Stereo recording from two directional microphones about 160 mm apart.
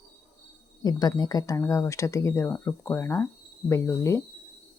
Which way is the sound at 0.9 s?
25° left (ahead or behind).